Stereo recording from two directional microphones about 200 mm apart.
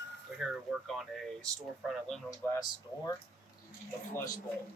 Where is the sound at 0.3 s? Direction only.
Centre (ahead or behind).